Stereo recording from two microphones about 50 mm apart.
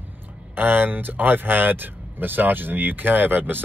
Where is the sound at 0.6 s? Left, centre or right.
Right.